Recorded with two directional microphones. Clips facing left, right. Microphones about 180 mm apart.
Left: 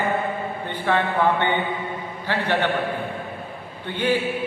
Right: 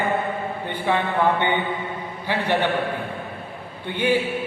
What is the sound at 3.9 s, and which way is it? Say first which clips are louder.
Speech: right 1 dB; 10° right (ahead or behind).